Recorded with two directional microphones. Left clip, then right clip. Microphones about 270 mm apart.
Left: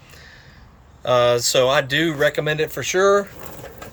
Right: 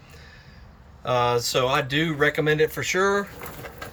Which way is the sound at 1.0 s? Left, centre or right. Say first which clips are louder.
Left 6 dB; centre.